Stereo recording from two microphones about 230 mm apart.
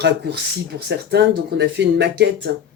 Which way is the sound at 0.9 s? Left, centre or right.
Right.